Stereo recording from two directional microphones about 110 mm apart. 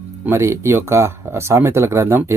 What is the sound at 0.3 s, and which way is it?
Speech, 25° right (ahead or behind).